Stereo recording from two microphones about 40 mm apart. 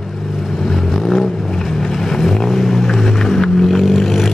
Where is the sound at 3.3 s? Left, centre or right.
Centre.